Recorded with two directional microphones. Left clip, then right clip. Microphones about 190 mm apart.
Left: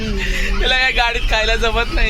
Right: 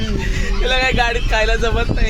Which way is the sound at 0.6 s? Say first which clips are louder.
Left 1 dB; 20° left (ahead or behind).